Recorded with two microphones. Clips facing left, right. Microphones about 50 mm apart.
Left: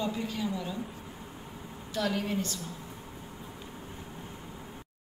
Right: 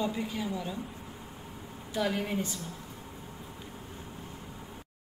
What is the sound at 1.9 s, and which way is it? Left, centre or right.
Speech, centre.